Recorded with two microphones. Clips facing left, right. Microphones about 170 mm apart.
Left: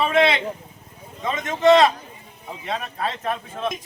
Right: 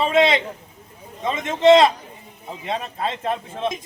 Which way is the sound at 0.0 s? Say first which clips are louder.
Right 1 dB; 20° right (ahead or behind).